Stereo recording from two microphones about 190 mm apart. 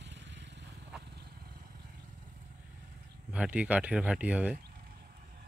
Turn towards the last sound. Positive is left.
turn(degrees=-5)  # may be behind; listen again after turning